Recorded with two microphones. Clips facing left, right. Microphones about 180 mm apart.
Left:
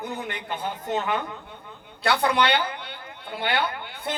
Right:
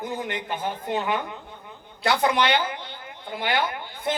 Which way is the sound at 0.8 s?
15° right (ahead or behind).